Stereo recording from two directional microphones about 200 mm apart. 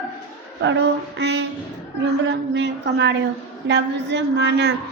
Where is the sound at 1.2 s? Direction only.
60° right (ahead or behind).